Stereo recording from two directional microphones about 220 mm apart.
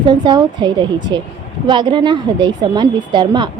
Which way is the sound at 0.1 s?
20° right (ahead or behind).